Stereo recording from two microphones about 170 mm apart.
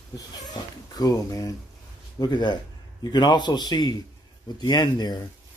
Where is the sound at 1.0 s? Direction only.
20° left (ahead or behind).